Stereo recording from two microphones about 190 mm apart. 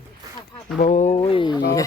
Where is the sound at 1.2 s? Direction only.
25° left (ahead or behind).